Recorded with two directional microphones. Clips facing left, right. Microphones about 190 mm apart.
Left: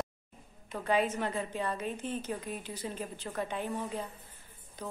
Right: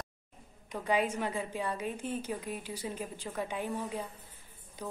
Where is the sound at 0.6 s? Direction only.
15° right (ahead or behind).